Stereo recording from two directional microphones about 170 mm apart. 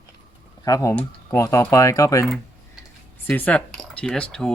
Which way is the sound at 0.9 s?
10° left (ahead or behind).